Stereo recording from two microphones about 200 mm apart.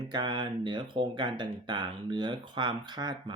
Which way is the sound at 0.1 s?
20° right (ahead or behind).